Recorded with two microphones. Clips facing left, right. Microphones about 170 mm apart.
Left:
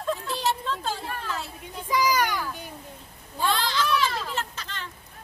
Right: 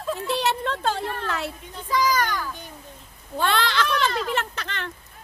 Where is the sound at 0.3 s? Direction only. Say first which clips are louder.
Right 3 dB; 70° right (ahead or behind).